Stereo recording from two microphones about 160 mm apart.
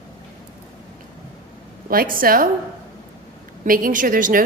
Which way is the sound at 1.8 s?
60° right (ahead or behind).